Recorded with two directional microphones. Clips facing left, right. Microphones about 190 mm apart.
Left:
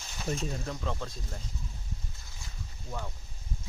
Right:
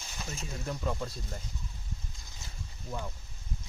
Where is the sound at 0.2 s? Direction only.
Centre (ahead or behind).